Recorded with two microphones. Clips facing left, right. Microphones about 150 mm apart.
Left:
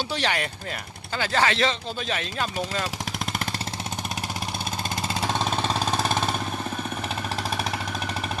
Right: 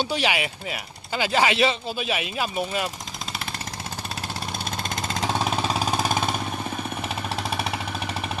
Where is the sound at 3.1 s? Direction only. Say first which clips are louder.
Left 4 dB; 55° left (ahead or behind).